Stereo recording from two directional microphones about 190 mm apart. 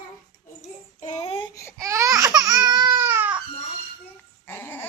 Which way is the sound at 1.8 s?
15° right (ahead or behind).